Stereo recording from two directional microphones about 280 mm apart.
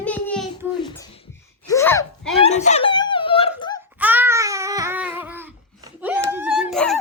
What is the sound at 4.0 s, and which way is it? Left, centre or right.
Babbling, centre.